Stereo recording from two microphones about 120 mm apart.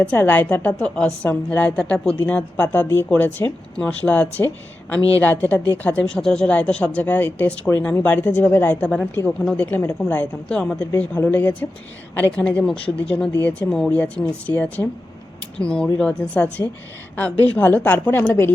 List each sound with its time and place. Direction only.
0.1 s a woman's voice: 15° left (ahead or behind)